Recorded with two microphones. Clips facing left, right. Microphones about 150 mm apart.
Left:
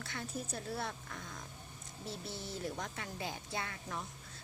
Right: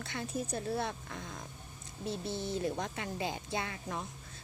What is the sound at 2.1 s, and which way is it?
A woman's voice, 20° right (ahead or behind).